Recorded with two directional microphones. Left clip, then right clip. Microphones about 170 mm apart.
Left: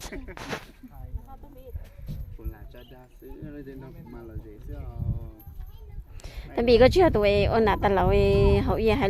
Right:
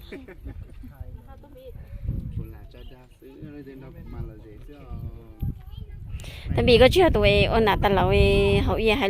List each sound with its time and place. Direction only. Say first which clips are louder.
0.1 s a woman's voice: even; centre (ahead or behind)
3.4 s speech: even; 30° right (ahead or behind)
6.2 s a woman's voice: right 2 dB; centre (ahead or behind)